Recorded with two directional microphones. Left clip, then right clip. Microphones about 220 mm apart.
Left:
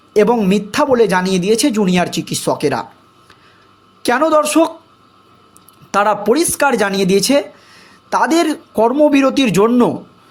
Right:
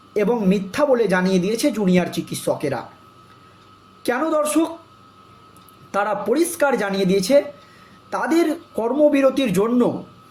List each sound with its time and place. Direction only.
0.1 s speech: 45° left (ahead or behind)
4.0 s speech: 45° left (ahead or behind)
5.9 s speech: 45° left (ahead or behind)